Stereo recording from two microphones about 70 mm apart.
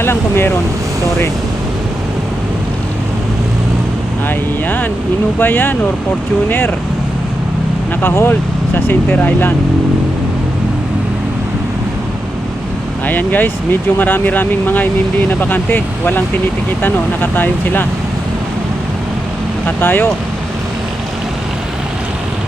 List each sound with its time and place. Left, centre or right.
0.0 s speech: left
4.3 s speech: left
8.0 s speech: left
13.1 s speech: left
19.6 s speech: left